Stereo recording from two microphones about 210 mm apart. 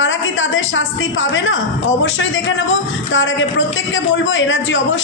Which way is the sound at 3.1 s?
60° left (ahead or behind).